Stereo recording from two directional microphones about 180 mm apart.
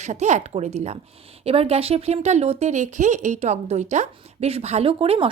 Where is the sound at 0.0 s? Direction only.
40° right (ahead or behind).